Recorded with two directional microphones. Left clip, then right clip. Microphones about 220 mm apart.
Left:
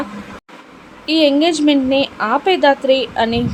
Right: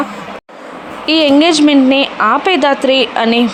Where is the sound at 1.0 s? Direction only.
20° right (ahead or behind).